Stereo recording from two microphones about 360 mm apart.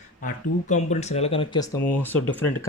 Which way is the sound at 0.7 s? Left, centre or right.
Centre.